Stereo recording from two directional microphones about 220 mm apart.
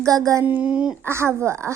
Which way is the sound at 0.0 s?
15° right (ahead or behind).